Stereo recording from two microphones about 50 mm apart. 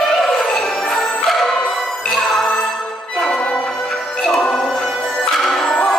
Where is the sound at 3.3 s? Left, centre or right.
Left.